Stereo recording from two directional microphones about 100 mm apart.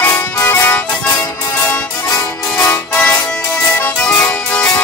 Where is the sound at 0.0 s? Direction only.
20° left (ahead or behind).